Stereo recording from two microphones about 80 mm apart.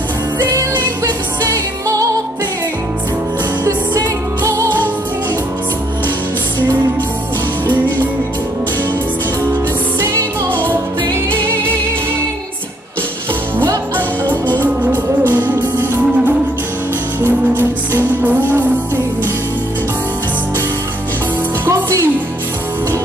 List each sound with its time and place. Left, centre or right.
0.4 s music: right
4.4 s music: right
9.9 s music: right
15.3 s music: right
21.6 s music: right